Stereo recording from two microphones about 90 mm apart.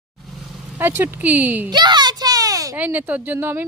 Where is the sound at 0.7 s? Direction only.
20° right (ahead or behind).